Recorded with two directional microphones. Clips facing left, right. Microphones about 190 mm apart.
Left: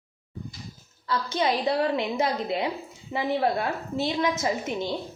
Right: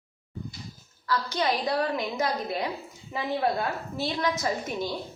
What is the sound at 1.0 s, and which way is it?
A woman's voice, 25° left (ahead or behind).